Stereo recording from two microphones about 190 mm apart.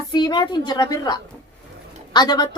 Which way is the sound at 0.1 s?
20° left (ahead or behind).